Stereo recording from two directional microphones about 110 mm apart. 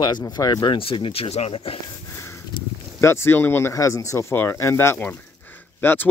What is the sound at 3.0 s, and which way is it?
Speech, 25° left (ahead or behind).